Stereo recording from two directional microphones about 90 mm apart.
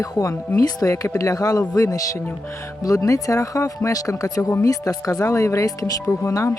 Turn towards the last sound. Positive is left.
turn(degrees=35)  # may be behind; listen again after turning